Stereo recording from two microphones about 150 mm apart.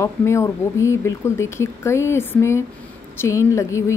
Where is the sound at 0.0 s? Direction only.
20° left (ahead or behind).